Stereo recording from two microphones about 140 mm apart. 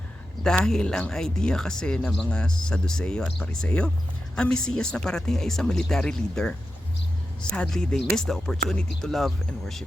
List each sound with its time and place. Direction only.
0.4 s speech: 5° left (ahead or behind)
7.5 s speech: 5° left (ahead or behind)